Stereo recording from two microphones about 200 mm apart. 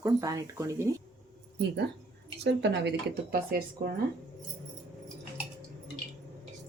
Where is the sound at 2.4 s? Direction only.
55° right (ahead or behind).